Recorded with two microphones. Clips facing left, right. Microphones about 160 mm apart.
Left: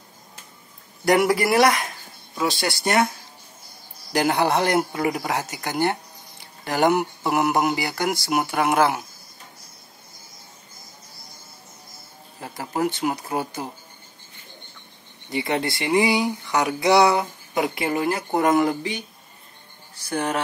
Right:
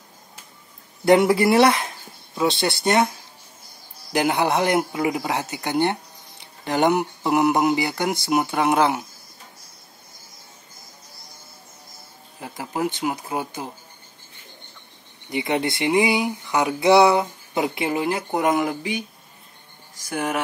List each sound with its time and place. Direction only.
1.0 s speech: 25° right (ahead or behind)
4.1 s speech: 20° right (ahead or behind)
12.4 s speech: 15° right (ahead or behind)
15.2 s speech: 20° right (ahead or behind)
20.2 s speech: 10° right (ahead or behind)